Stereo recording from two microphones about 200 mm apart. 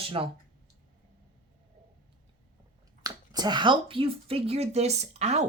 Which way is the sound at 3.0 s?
20° right (ahead or behind).